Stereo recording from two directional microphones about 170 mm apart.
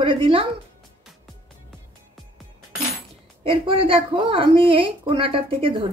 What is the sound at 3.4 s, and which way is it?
Speech, 30° right (ahead or behind).